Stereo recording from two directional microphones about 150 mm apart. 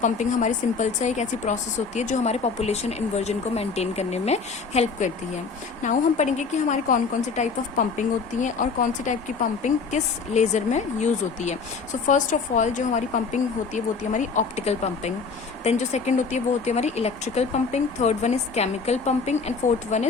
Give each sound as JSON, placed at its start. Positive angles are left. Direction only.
{"t": 0.0, "sound": "a woman's voice", "side_deg": 55}